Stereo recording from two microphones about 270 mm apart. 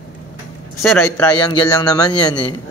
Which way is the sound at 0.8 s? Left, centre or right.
Centre.